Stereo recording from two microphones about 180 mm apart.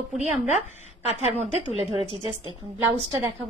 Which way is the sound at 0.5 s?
40° left (ahead or behind).